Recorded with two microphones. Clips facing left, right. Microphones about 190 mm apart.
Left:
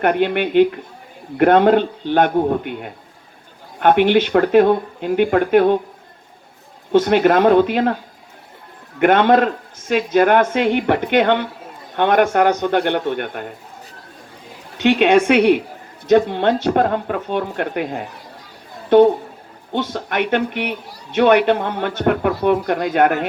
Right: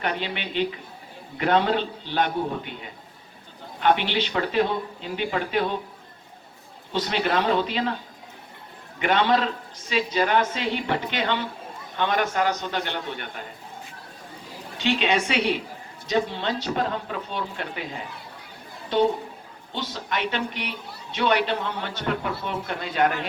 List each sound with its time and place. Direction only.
0.0 s speech: 55° left (ahead or behind)
6.9 s speech: 55° left (ahead or behind)
9.0 s speech: 55° left (ahead or behind)
14.8 s speech: 55° left (ahead or behind)